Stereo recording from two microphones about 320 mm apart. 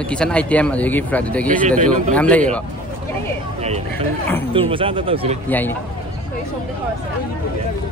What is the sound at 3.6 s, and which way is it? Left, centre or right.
Vehicle, centre.